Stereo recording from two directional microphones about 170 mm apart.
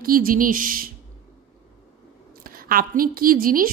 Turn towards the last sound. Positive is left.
turn(degrees=-55)  # may be behind; listen again after turning